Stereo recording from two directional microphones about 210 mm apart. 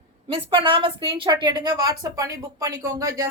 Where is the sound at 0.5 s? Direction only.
25° right (ahead or behind).